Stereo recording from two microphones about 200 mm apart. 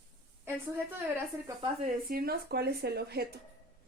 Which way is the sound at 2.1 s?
50° right (ahead or behind).